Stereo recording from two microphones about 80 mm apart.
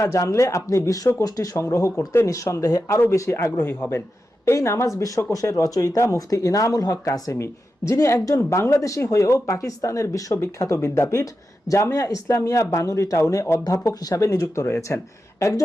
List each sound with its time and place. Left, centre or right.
0.0 s speech: left
1.6 s speech: left